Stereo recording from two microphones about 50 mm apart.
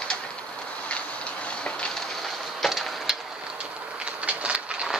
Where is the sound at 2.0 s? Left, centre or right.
Centre.